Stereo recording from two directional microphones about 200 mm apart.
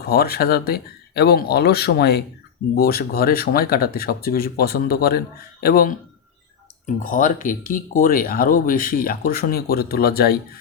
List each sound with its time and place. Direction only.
0.0 s speech: 50° left (ahead or behind)